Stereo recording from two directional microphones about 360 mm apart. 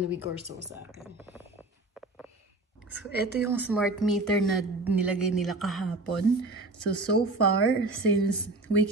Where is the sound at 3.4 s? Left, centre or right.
Centre.